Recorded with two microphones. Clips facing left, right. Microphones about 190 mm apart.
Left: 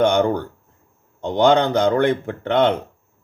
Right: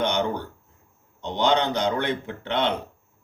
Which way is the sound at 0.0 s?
50° left (ahead or behind).